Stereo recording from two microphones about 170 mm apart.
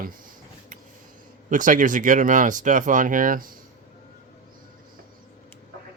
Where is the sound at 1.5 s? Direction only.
50° right (ahead or behind).